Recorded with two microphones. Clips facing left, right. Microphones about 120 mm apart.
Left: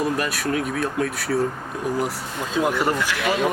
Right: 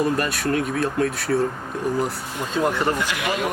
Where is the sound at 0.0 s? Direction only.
Centre (ahead or behind).